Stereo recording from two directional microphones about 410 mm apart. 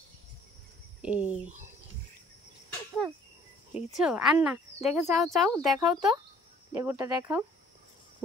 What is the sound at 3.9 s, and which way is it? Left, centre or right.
Speech, centre.